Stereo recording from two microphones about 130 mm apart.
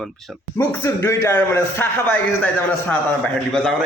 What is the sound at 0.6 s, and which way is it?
A man's voice, 20° left (ahead or behind).